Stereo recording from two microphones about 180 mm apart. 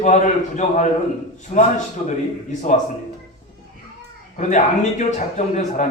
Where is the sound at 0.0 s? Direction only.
40° left (ahead or behind).